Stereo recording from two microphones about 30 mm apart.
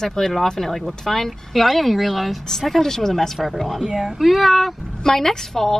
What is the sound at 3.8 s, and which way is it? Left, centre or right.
Speech, centre.